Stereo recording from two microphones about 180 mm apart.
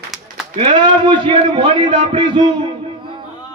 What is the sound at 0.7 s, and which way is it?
A man's voice, 25° right (ahead or behind).